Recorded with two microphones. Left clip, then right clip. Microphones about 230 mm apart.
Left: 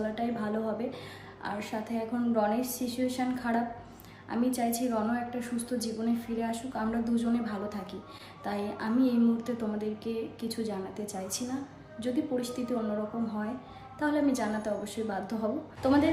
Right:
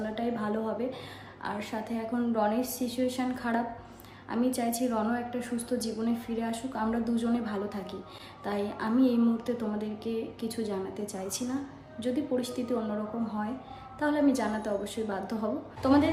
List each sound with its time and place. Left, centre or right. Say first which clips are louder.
0.1 s a sound: right 1 dB; centre
1.4 s a woman's voice: even; centre
14.0 s a woman's voice: right 2 dB; centre